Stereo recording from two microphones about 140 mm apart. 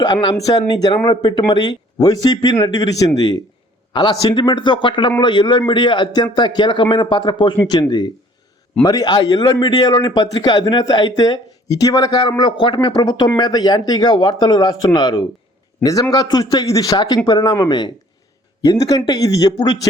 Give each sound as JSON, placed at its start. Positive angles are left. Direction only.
{"t": 0.0, "sound": "a man's voice", "side_deg": 30}